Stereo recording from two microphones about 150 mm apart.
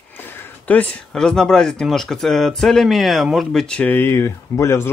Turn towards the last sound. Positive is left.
turn(degrees=15)  # may be behind; listen again after turning